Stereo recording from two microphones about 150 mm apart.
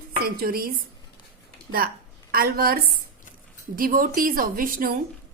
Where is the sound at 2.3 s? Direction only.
80° right.